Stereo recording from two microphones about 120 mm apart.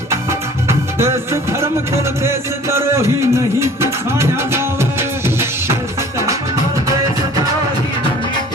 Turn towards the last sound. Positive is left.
turn(degrees=-25)  # may be behind; listen again after turning